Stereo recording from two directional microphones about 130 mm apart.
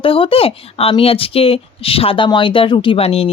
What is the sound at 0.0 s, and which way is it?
Speech, 45° left (ahead or behind).